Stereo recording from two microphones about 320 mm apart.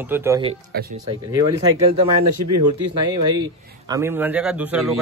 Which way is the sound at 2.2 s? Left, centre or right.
Right.